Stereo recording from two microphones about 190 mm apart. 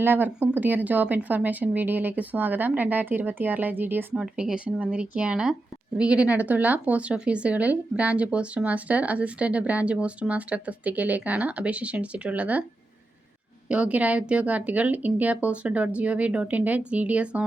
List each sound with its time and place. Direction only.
0.0 s a woman's voice: 10° right (ahead or behind)
13.7 s a woman's voice: 5° right (ahead or behind)